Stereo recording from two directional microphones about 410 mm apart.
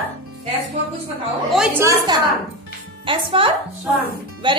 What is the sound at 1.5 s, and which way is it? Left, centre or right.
A woman's voice, centre.